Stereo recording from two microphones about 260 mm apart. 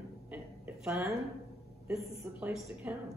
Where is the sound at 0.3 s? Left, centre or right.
Centre.